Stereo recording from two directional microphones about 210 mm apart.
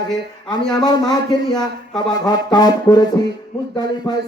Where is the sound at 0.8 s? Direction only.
20° left (ahead or behind).